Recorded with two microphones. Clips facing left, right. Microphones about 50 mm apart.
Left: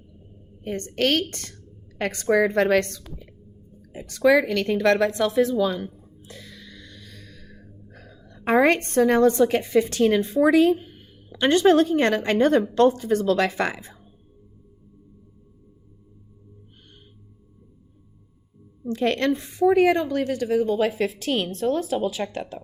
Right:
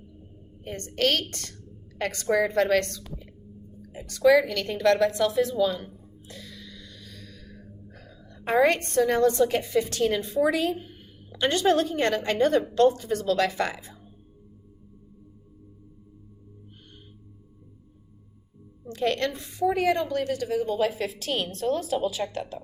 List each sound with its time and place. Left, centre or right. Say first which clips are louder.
0.6 s a woman's voice: left 2 dB; left
4.2 s a woman's voice: left 1 dB; left
6.2 s music: left 1 dB; left
7.9 s a woman's voice: left 1 dB; left
18.9 s a woman's voice: left 4 dB; left